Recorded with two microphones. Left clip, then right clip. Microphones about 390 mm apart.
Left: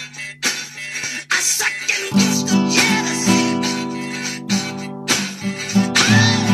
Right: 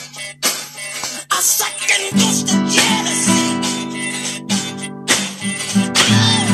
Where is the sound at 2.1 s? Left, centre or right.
Centre.